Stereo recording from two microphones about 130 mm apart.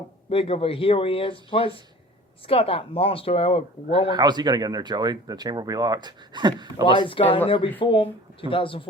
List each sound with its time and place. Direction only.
0.3 s speech: 45° left (ahead or behind)
4.1 s speech: 35° right (ahead or behind)
6.9 s speech: 40° left (ahead or behind)